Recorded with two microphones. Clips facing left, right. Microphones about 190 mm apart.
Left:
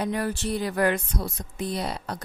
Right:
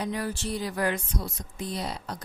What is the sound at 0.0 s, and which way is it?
Speech, 60° left (ahead or behind).